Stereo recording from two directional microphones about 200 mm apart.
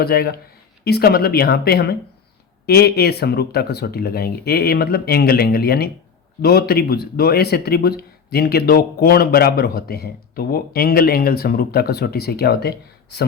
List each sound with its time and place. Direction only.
0.0 s speech: 50° left (ahead or behind)